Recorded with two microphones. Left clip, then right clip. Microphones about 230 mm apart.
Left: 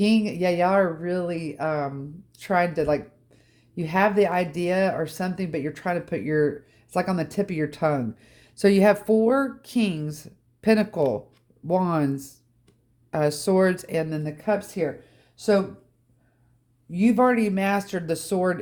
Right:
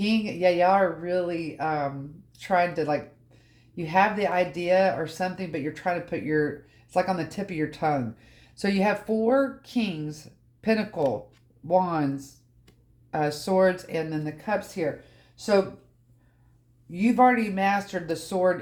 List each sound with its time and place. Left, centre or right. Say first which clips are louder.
0.0 s speech: left 1 dB; left
16.9 s speech: even; left